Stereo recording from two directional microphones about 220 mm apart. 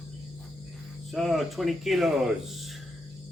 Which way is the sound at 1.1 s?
Centre (ahead or behind).